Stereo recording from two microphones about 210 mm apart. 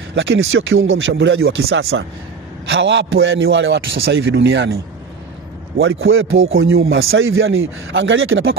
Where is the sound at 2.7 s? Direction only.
60° right (ahead or behind).